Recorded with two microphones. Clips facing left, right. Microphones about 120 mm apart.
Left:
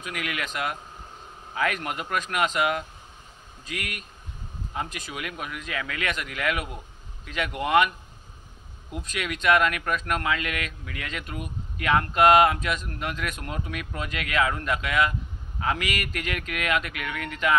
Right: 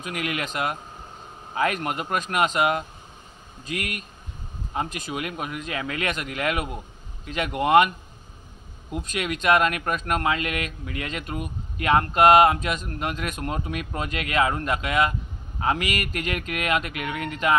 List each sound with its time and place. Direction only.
0.0 s speech: 35° right (ahead or behind)
9.2 s speech: 30° right (ahead or behind)